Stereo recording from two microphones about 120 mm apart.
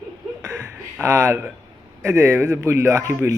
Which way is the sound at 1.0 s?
25° right (ahead or behind).